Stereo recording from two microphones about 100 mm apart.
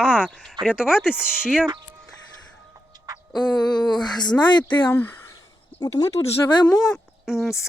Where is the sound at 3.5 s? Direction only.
45° left (ahead or behind).